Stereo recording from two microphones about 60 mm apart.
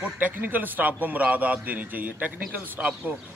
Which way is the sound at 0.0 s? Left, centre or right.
Right.